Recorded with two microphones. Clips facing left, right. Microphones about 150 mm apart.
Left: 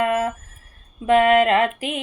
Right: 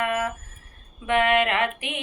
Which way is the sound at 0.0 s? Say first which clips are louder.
Left 5 dB; 30° left (ahead or behind).